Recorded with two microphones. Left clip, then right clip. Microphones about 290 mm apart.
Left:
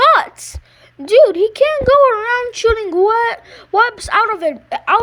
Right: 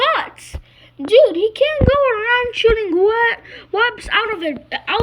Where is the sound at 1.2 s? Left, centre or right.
Left.